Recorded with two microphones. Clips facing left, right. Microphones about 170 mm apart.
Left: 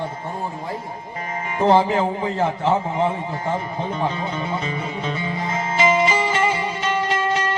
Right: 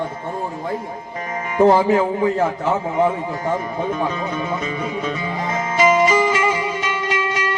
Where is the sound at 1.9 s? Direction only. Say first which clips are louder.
Right 4 dB; 30° left (ahead or behind).